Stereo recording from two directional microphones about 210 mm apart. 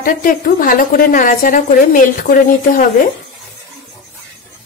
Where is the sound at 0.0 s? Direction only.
40° left (ahead or behind).